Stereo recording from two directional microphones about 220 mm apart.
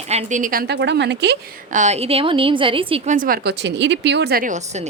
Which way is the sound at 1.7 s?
30° right (ahead or behind).